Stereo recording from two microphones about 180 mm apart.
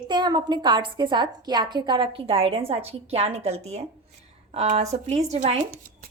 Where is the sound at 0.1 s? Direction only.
25° right (ahead or behind).